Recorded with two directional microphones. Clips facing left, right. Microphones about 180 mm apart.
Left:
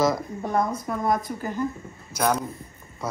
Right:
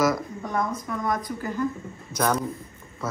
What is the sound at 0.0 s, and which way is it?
Speech, 30° left (ahead or behind).